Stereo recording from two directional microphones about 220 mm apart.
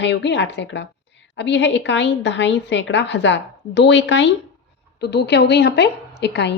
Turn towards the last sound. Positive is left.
turn(degrees=50)  # may be behind; listen again after turning